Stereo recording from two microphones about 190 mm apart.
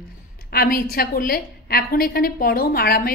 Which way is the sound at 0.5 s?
50° left (ahead or behind).